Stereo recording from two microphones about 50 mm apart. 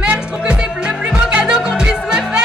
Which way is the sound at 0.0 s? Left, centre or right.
Right.